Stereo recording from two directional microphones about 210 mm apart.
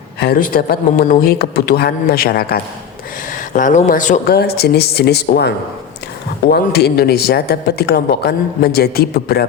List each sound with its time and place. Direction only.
0.2 s speech: 45° left (ahead or behind)